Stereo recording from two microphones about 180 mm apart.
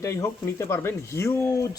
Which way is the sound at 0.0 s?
15° left (ahead or behind).